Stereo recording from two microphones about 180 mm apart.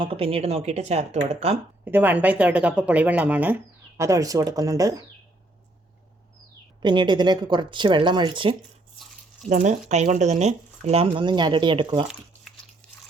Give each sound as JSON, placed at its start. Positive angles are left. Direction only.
{"t": 0.0, "sound": "speech", "side_deg": -30}
{"t": 1.8, "sound": "speech", "side_deg": -10}
{"t": 6.8, "sound": "speech", "side_deg": -25}
{"t": 9.5, "sound": "speech", "side_deg": -40}